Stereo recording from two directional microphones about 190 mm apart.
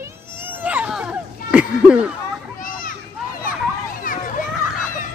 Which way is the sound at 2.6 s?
45° left (ahead or behind).